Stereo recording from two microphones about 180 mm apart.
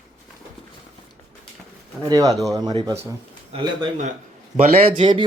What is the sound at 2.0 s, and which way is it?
Speech, 20° right (ahead or behind).